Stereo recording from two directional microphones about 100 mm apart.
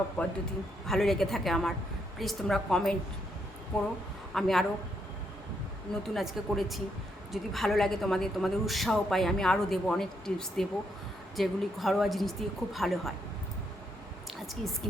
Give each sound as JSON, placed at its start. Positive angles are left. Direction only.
{"t": 0.2, "sound": "a man's voice", "side_deg": 15}
{"t": 0.9, "sound": "a woman's voice", "side_deg": 5}
{"t": 5.9, "sound": "a woman's voice", "side_deg": 0}
{"t": 14.4, "sound": "a sound", "side_deg": 0}